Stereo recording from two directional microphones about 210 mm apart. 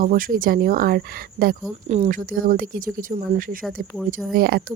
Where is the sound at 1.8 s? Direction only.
30° right (ahead or behind); by 4.7 s 45° right (ahead or behind).